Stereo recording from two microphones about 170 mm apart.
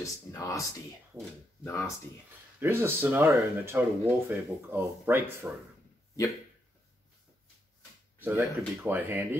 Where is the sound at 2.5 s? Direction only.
15° right (ahead or behind).